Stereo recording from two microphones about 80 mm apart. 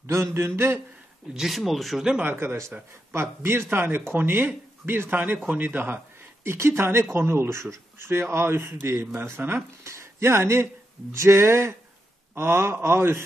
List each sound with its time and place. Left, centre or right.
0.0 s a man's voice: right
1.3 s speech: centre
2.2 s speech: right